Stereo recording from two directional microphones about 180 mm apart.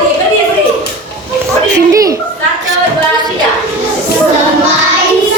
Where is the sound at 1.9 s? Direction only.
20° right (ahead or behind).